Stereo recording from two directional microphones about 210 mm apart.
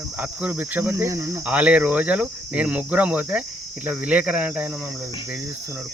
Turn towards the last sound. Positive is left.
turn(degrees=-5)  # may be behind; listen again after turning